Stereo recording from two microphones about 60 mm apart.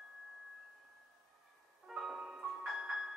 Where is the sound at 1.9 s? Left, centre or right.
Centre.